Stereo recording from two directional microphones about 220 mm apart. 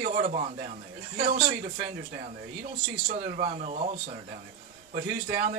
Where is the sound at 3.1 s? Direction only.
30° right (ahead or behind).